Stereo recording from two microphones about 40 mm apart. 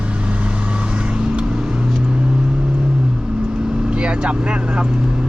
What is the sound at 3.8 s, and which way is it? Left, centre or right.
Speech, right.